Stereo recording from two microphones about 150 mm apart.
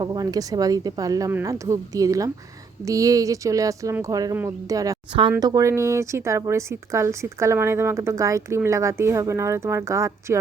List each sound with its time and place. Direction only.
0.0 s speech: 25° right (ahead or behind)